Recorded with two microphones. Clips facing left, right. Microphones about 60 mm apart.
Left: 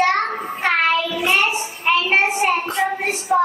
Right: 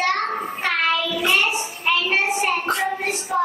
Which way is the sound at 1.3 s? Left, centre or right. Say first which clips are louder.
Left 2 dB; left.